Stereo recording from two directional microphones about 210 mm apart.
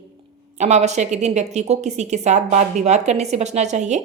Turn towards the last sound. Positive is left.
turn(degrees=-35)  # may be behind; listen again after turning